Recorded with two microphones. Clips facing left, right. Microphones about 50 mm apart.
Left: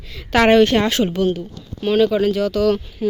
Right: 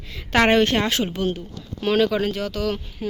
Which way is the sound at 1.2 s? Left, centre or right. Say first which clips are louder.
Left 6 dB; right.